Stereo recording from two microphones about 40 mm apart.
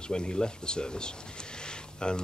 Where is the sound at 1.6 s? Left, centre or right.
Left.